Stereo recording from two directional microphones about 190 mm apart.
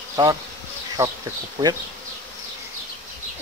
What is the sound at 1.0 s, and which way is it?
Speech, 10° right (ahead or behind).